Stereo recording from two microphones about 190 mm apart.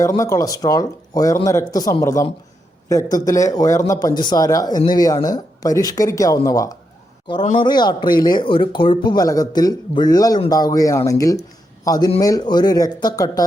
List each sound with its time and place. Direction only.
0.0 s speech: 15° left (ahead or behind)